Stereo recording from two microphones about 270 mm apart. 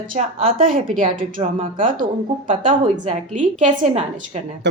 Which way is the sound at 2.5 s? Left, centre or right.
Right.